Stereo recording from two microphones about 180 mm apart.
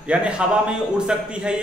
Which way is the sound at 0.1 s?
5° right (ahead or behind).